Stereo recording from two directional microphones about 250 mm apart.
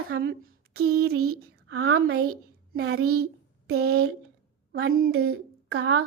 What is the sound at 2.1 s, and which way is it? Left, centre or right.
Speech, right.